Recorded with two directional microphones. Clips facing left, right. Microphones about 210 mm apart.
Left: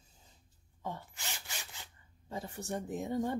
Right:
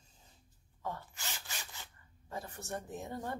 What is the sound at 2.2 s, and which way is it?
Speech, 15° left (ahead or behind).